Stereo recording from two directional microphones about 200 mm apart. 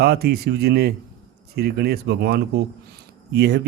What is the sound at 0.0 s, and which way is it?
Speech, 55° right (ahead or behind).